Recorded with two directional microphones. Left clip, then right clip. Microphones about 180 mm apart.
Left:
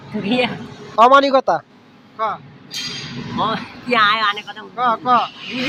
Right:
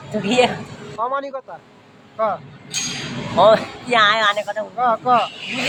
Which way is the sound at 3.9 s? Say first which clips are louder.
Even; 10° right (ahead or behind).